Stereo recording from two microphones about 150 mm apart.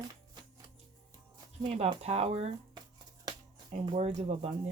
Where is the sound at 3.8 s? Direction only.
45° right (ahead or behind).